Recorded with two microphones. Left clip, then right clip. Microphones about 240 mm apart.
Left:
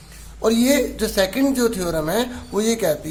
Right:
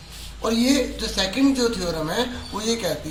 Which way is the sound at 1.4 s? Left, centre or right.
Left.